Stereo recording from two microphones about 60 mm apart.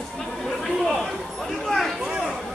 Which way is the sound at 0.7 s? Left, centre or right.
Centre.